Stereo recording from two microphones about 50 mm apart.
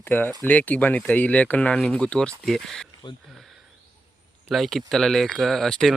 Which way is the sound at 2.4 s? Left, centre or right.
Centre.